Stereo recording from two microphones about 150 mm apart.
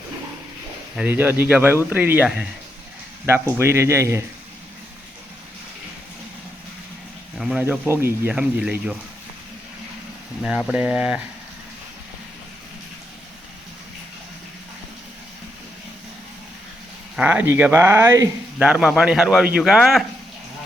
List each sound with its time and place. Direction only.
0.9 s speech: 10° right (ahead or behind)
3.2 s speech: 15° right (ahead or behind)
7.3 s speech: 5° right (ahead or behind)
7.6 s speech: 15° right (ahead or behind)
10.4 s speech: 5° right (ahead or behind)
17.2 s speech: 10° right (ahead or behind)
18.6 s a man's voice: 5° right (ahead or behind)